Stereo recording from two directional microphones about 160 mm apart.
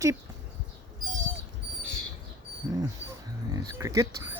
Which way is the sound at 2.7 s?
20° right (ahead or behind).